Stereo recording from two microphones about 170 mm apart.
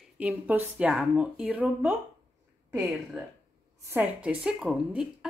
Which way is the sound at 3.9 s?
5° right (ahead or behind).